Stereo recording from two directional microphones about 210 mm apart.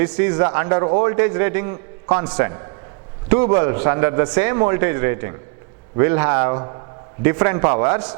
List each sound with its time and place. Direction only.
0.0 s a man's voice: 10° right (ahead or behind)
0.3 s a man's voice: 20° right (ahead or behind)